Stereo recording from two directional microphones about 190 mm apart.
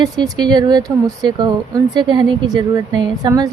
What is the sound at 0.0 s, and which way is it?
A woman's voice, 20° right (ahead or behind).